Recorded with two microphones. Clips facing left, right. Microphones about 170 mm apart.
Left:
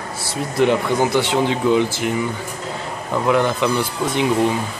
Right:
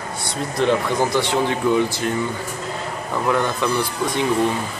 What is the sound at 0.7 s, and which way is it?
Speech, 20° left (ahead or behind).